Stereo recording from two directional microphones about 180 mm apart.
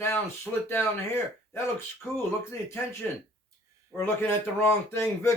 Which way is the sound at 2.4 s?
15° left (ahead or behind).